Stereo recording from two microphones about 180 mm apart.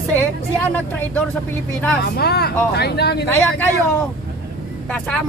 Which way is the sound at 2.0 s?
65° left (ahead or behind).